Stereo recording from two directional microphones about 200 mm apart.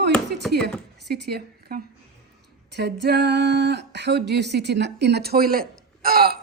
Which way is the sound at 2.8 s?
55° right (ahead or behind).